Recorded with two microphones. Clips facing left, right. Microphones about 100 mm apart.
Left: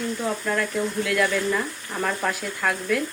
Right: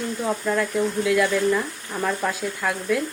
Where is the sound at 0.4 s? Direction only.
15° right (ahead or behind).